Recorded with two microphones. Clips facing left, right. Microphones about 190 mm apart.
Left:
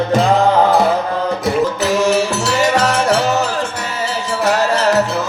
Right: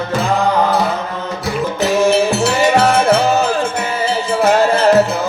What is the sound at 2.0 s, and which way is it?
Music, 45° left (ahead or behind).